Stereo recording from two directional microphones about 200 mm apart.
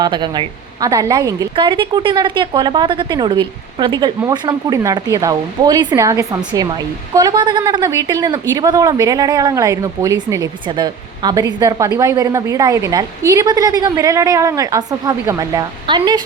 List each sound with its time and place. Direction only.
0.0 s a woman's voice: 20° right (ahead or behind)